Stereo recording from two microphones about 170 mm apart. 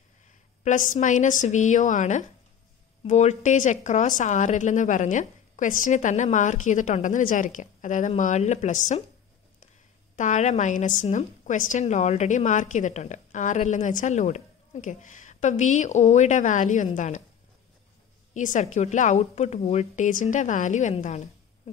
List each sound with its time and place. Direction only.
0.7 s a woman's voice: 50° left (ahead or behind)
10.1 s a woman's voice: 45° left (ahead or behind)
18.3 s a woman's voice: 45° left (ahead or behind)